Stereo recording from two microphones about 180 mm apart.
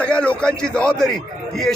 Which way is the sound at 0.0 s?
5° left (ahead or behind).